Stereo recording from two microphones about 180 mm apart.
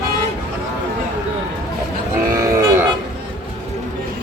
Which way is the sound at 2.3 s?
15° right (ahead or behind).